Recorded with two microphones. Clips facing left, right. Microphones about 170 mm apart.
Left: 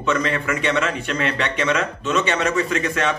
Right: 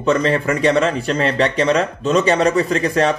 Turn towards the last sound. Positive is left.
turn(degrees=-35)  # may be behind; listen again after turning